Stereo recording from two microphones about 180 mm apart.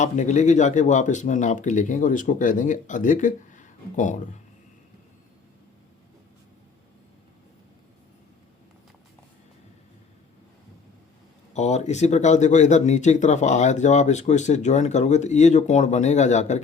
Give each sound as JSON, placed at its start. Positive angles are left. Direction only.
{"t": 0.0, "sound": "speech", "side_deg": 40}
{"t": 11.5, "sound": "speech", "side_deg": 40}